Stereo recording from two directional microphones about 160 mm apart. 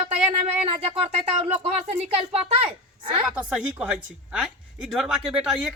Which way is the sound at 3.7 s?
5° right (ahead or behind).